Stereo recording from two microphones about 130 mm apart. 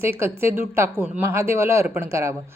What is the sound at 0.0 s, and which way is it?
A woman's voice, 20° right (ahead or behind).